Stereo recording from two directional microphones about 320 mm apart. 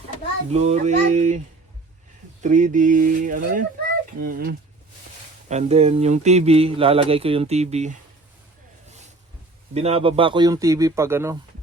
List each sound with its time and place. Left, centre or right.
0.5 s speech: right
2.4 s speech: right
9.7 s speech: centre